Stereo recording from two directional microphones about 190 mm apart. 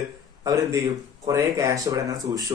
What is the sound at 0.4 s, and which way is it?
A man's voice, 15° right (ahead or behind).